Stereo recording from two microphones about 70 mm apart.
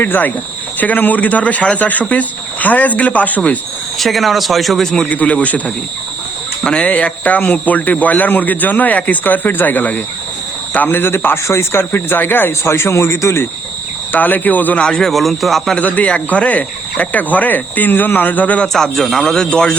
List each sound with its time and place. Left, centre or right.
0.0 s a man's voice: left
3.9 s speech: centre
5.0 s a man's voice: centre; by 13.5 s left
14.1 s a man's voice: left
14.8 s speech: centre
15.7 s a man's voice: left
18.7 s speech: centre